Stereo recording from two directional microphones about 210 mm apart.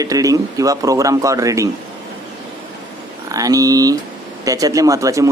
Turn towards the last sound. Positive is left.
turn(degrees=-15)  # may be behind; listen again after turning